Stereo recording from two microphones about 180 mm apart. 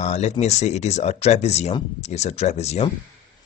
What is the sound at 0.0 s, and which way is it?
Speech, 40° left (ahead or behind).